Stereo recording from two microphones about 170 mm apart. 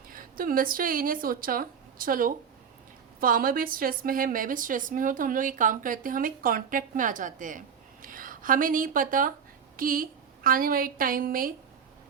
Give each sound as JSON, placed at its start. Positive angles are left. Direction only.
{"t": 0.1, "sound": "a woman's voice", "side_deg": -55}